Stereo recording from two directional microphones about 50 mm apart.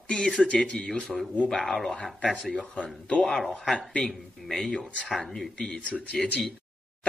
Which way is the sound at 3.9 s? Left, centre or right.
Centre.